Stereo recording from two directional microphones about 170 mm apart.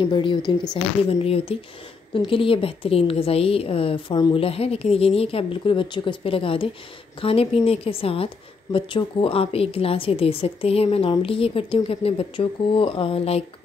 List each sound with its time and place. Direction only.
0.0 s a woman's voice: 30° left (ahead or behind)